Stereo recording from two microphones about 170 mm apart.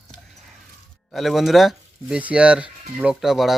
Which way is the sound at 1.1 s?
Centre (ahead or behind).